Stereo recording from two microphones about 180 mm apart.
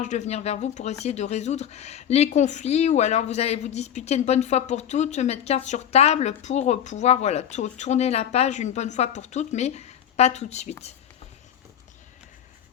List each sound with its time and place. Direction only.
0.0 s speech: 40° left (ahead or behind)